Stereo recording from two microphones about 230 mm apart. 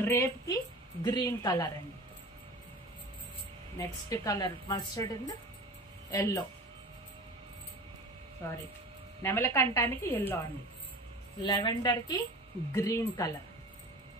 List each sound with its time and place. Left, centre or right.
0.0 s a woman's voice: centre
3.7 s a woman's voice: centre
8.4 s a woman's voice: centre
11.4 s a woman's voice: centre